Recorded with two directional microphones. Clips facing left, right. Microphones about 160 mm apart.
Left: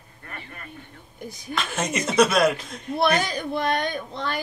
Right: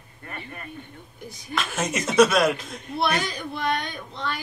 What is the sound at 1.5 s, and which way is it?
Speech, 5° right (ahead or behind).